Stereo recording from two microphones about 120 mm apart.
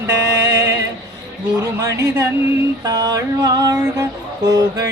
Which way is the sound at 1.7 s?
25° right (ahead or behind).